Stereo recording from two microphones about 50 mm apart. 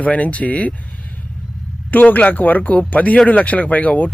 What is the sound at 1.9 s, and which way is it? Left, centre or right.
Speech, left.